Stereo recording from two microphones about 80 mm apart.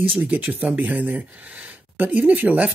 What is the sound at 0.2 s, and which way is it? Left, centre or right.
Speech, right.